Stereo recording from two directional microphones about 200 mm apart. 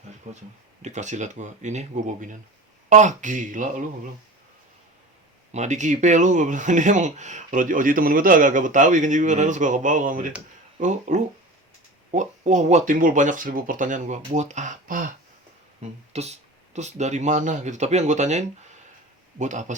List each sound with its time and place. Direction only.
0.3 s speech: 35° right (ahead or behind)
5.5 s speech: 35° right (ahead or behind)
16.1 s speech: 35° right (ahead or behind)